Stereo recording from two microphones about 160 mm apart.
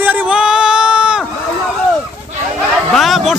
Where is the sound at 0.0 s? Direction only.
10° right (ahead or behind).